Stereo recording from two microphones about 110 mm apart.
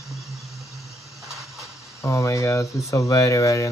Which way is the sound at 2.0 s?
25° left (ahead or behind).